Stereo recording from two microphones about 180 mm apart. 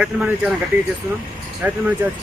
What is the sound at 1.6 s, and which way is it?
Speech, 10° right (ahead or behind).